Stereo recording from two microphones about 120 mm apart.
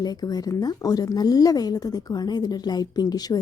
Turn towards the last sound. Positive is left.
turn(degrees=35)  # may be behind; listen again after turning